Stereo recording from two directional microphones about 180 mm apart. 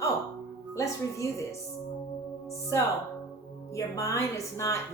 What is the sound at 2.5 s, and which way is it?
Speech, 15° left (ahead or behind).